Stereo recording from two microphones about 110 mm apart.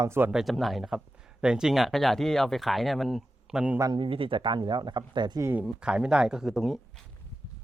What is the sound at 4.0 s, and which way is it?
Speech, 55° right (ahead or behind).